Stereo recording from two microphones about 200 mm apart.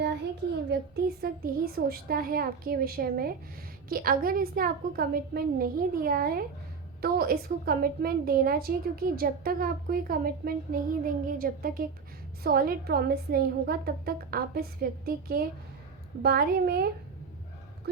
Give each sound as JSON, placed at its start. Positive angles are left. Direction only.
{"t": 0.7, "sound": "a woman's voice", "side_deg": -50}